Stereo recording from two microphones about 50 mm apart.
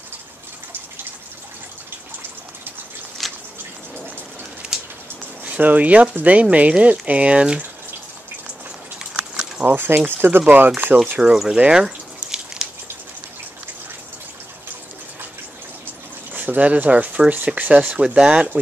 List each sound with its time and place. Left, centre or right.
3.2 s drip: centre
4.7 s a sound: centre
5.4 s speech: right
9.1 s a sound: centre
9.7 s speech: right
10.9 s speech: centre
11.7 s drip: centre
16.3 s speech: right
17.8 s speech: centre